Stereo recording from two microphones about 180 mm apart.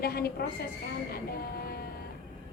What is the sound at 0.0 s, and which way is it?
Speech, 60° left (ahead or behind).